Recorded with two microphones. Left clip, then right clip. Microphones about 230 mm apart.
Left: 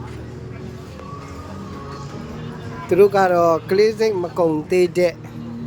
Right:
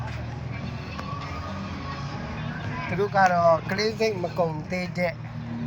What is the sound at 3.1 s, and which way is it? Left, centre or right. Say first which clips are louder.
Speech: left 4 dB; left.